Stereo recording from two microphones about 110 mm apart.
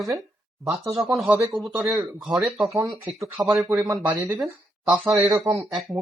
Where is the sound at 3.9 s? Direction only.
30° right (ahead or behind).